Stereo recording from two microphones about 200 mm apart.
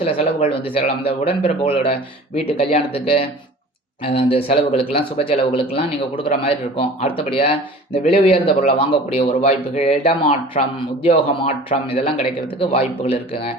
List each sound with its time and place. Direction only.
0.0 s speech: 30° left (ahead or behind)